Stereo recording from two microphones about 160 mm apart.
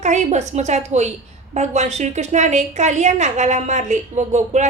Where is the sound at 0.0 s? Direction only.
45° right (ahead or behind).